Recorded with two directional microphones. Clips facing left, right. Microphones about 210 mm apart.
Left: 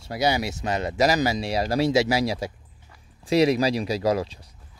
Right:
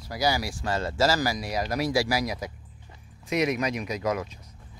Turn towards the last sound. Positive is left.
turn(degrees=35)  # may be behind; listen again after turning